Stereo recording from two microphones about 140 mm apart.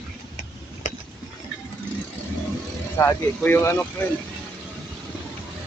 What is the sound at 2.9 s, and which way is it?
Speech, 15° left (ahead or behind).